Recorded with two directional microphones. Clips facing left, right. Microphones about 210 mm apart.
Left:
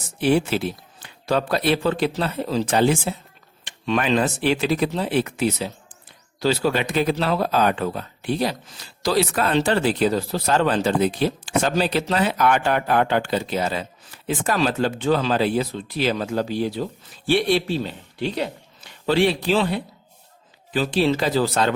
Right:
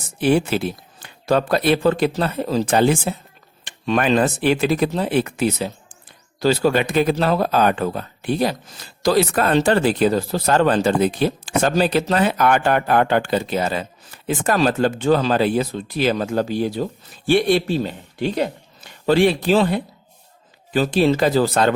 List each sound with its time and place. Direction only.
0.2 s speech: 50° right (ahead or behind)